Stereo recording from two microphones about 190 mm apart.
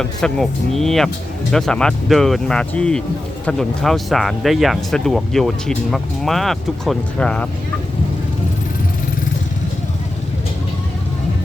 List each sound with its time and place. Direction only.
0.0 s speech: centre (ahead or behind)